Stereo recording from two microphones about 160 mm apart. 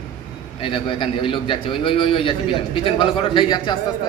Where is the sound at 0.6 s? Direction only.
30° left (ahead or behind).